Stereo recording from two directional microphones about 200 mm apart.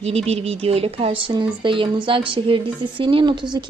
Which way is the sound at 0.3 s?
30° right (ahead or behind).